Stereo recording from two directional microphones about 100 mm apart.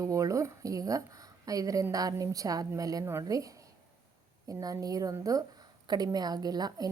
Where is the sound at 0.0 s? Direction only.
35° right (ahead or behind).